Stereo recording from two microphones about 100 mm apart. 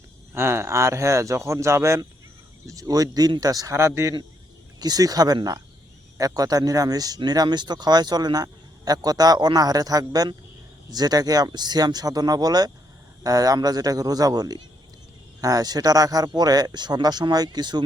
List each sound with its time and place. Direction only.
0.3 s speech: 25° right (ahead or behind)
4.8 s speech: 40° right (ahead or behind)